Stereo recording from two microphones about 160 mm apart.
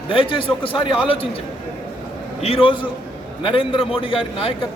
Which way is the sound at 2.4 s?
35° left (ahead or behind).